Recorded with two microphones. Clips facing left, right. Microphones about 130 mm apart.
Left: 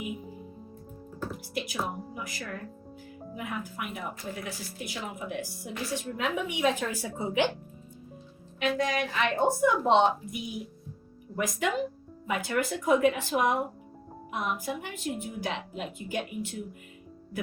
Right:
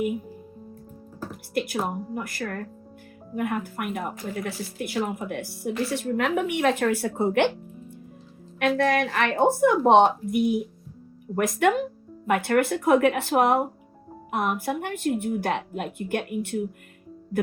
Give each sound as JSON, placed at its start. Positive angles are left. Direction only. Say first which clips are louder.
{"t": 1.5, "sound": "a woman's voice", "louder": "right 7 dB", "side_deg": -55}
{"t": 8.5, "sound": "a woman's voice", "louder": "right 6 dB", "side_deg": -65}